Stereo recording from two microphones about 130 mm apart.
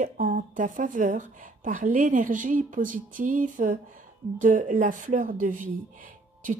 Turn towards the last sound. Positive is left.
turn(degrees=-90)